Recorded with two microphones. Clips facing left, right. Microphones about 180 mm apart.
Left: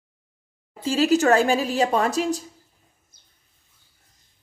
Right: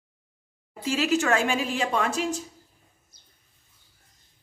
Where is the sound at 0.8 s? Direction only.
35° left (ahead or behind).